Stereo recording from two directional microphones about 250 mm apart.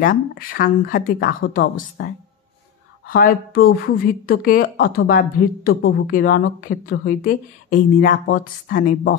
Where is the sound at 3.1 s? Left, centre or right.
Left.